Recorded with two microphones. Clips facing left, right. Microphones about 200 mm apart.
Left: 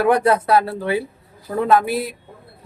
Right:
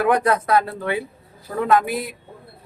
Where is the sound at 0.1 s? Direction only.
30° left (ahead or behind).